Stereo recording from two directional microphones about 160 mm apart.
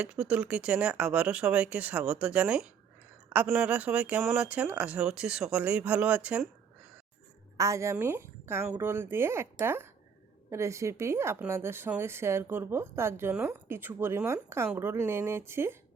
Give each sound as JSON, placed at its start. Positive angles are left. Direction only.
{"t": 0.0, "sound": "a woman's voice", "side_deg": -5}
{"t": 7.5, "sound": "a woman's voice", "side_deg": -20}